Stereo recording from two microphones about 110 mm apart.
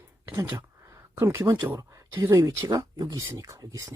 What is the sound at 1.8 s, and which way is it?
Speech, 30° right (ahead or behind).